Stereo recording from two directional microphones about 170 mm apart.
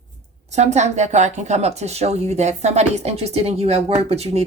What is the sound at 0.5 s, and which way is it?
Speech, 40° right (ahead or behind).